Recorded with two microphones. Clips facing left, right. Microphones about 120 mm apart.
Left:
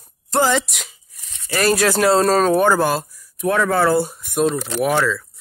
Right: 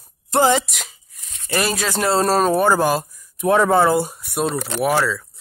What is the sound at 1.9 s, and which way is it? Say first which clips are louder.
Speech: right 1 dB; 5° right (ahead or behind).